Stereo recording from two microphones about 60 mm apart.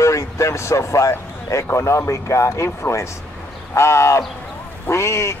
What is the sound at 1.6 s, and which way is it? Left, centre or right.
A man's voice, left.